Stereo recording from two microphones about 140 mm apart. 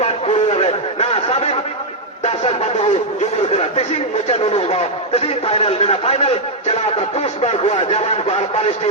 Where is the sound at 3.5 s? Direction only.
50° left (ahead or behind).